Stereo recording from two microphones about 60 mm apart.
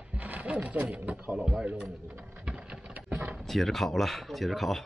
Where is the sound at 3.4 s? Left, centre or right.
Centre.